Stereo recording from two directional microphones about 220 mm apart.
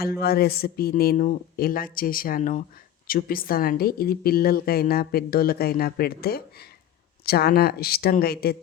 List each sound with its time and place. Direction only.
0.0 s speech: 45° left (ahead or behind)